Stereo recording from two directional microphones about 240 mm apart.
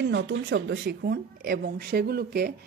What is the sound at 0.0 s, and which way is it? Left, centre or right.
A woman's voice, right.